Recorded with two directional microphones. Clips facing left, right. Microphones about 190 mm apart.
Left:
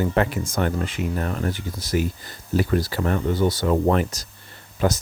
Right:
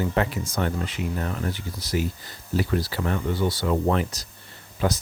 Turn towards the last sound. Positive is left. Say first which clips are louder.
# left 3 dB
turn(degrees=45)  # may be behind; listen again after turning